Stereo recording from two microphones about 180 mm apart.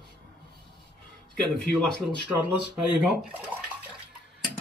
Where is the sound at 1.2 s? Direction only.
5° left (ahead or behind).